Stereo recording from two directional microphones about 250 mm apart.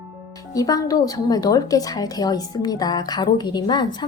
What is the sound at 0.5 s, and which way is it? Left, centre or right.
A woman's voice, centre.